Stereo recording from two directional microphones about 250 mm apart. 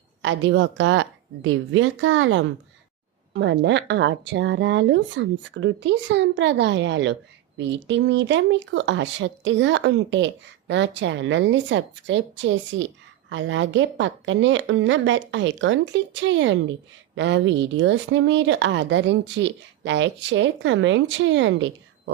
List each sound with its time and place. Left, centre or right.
0.2 s speech: right